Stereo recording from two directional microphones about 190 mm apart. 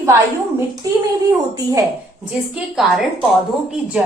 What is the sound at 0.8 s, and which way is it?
Speech, 15° right (ahead or behind).